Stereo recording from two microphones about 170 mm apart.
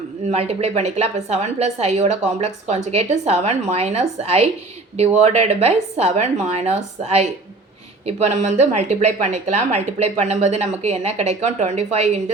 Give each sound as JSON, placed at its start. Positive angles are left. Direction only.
{"t": 0.3, "sound": "a woman's voice", "side_deg": -40}